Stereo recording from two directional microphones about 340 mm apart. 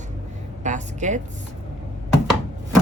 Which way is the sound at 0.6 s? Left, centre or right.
Right.